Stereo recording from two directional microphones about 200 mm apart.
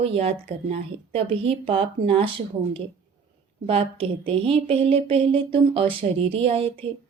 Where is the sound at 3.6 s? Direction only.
30° right (ahead or behind).